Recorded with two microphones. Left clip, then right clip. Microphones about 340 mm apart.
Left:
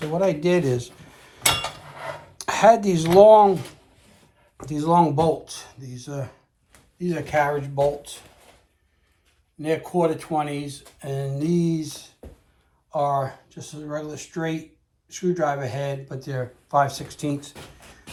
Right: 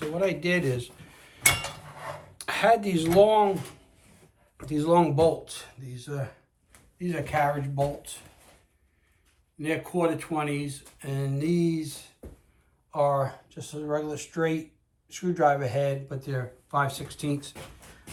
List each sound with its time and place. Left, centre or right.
0.3 s speech: centre
2.5 s speech: centre
2.9 s speech: left
4.5 s speech: centre
9.6 s speech: centre